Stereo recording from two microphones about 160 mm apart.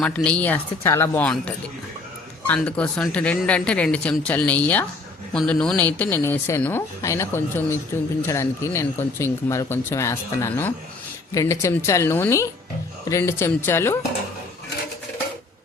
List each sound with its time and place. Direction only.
0.0 s speech: 10° left (ahead or behind)